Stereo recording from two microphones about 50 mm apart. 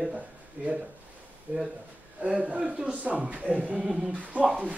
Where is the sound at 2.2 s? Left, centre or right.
Right.